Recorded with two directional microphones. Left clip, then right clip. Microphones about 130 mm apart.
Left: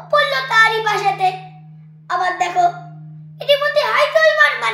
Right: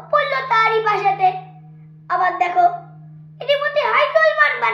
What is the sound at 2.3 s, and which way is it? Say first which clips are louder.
A child's voice: even; 40° left (ahead or behind).